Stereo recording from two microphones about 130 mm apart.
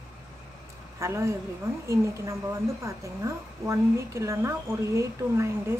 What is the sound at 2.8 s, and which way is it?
A woman's voice, 20° right (ahead or behind).